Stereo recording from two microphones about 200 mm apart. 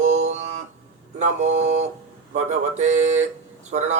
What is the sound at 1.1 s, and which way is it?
Speech, 35° right (ahead or behind).